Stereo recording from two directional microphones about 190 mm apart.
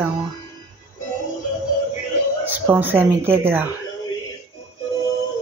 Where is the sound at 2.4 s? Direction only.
10° right (ahead or behind).